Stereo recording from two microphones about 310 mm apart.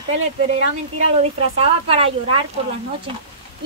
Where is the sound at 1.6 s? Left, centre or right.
Centre.